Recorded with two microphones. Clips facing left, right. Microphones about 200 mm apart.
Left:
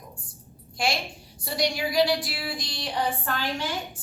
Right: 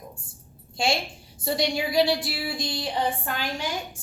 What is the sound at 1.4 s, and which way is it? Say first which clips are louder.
A woman's voice: right 2 dB; 25° right (ahead or behind).